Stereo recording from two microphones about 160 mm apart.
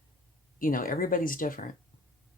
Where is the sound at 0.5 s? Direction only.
60° left (ahead or behind).